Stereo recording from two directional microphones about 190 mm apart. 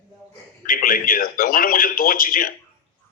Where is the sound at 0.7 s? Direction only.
45° left (ahead or behind).